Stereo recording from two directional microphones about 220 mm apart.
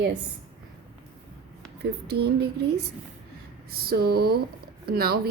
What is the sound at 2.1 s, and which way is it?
Speech, 50° right (ahead or behind).